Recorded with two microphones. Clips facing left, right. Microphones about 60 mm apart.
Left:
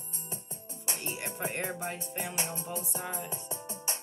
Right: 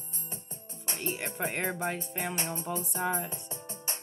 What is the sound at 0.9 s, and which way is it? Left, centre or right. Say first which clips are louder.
Music: right 3 dB; right.